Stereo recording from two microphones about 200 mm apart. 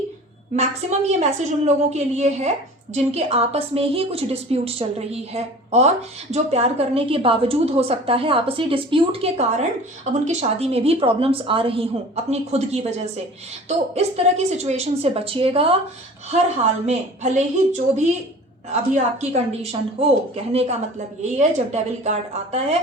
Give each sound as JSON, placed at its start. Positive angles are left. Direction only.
{"t": 0.5, "sound": "a woman's voice", "side_deg": -35}
{"t": 16.8, "sound": "a woman's voice", "side_deg": -35}